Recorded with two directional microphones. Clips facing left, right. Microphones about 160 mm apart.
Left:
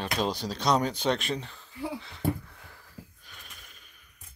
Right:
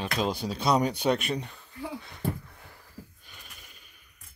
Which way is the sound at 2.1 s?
15° right (ahead or behind).